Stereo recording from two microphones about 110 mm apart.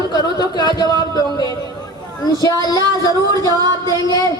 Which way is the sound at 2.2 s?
35° left (ahead or behind).